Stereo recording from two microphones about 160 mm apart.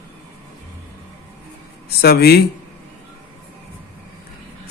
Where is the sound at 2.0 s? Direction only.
75° left (ahead or behind).